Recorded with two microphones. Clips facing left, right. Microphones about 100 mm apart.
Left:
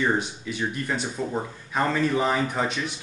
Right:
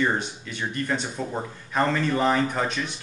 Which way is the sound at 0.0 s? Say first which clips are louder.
Even; 5° left (ahead or behind).